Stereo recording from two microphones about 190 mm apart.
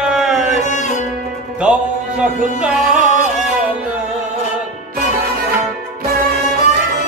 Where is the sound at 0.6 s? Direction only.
40° left (ahead or behind).